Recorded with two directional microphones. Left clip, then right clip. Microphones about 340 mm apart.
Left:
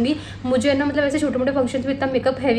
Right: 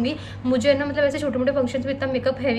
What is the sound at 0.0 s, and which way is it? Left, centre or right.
A woman's voice, centre.